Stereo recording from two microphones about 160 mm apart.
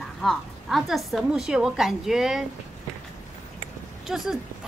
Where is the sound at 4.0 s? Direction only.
5° right (ahead or behind).